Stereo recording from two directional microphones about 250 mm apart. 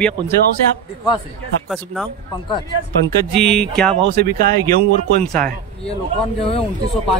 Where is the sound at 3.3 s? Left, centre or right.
Centre.